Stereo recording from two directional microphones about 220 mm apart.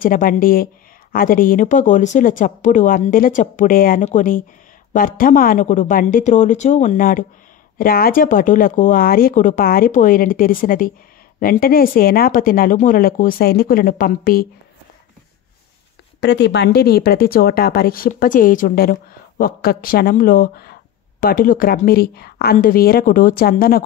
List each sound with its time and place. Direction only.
0.0 s speech: 40° left (ahead or behind)
16.2 s speech: 50° left (ahead or behind)